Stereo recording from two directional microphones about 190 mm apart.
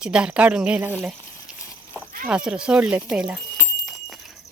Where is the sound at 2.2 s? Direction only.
5° right (ahead or behind).